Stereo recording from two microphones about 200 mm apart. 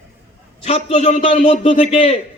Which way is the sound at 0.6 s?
35° left (ahead or behind).